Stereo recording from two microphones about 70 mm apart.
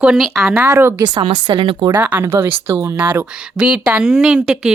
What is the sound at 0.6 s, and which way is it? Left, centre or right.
Speech, right.